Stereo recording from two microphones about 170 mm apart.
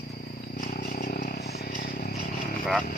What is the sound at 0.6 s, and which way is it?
Vehicle, 60° left (ahead or behind).